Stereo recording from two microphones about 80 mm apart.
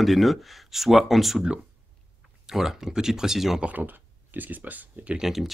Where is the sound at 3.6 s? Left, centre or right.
Right.